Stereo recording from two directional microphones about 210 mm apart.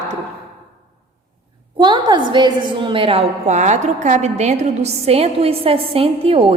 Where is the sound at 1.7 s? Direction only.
20° right (ahead or behind).